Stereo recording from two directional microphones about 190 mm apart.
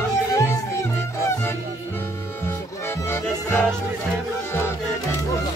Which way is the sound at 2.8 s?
15° left (ahead or behind).